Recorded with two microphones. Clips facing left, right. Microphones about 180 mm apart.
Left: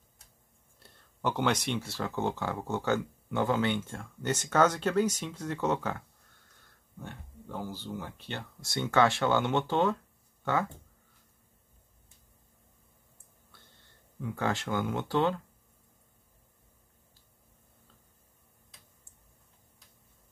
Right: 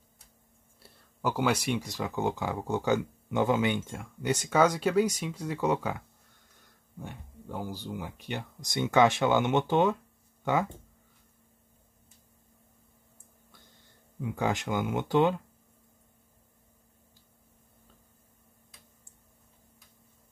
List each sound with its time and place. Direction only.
0.7 s speech: 5° right (ahead or behind)
14.2 s speech: 15° right (ahead or behind)